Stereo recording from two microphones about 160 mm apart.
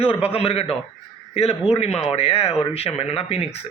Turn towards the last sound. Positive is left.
turn(degrees=40)  # may be behind; listen again after turning